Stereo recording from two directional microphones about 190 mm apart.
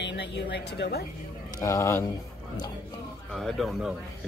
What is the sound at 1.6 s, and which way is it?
Speech, 15° left (ahead or behind).